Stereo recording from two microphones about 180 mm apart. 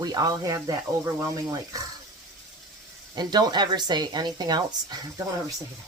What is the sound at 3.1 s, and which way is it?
Speech, 25° right (ahead or behind).